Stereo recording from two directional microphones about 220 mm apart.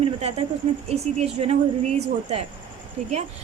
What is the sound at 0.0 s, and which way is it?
Speech, 25° right (ahead or behind).